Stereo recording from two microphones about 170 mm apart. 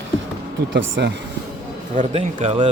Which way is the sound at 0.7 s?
90° right.